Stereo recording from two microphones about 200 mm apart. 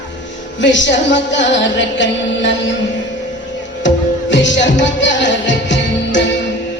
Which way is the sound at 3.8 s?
65° left (ahead or behind).